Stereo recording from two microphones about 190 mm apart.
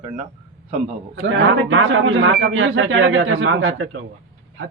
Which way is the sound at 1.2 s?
75° right (ahead or behind).